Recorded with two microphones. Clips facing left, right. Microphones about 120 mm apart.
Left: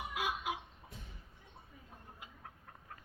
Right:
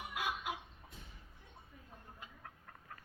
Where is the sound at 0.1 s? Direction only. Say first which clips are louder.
Left 1 dB; 15° left (ahead or behind).